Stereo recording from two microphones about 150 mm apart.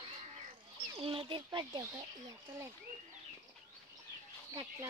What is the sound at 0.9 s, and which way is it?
Speech, 35° right (ahead or behind).